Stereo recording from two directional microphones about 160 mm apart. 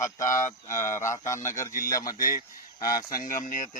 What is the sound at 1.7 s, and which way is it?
Speech, 60° left (ahead or behind).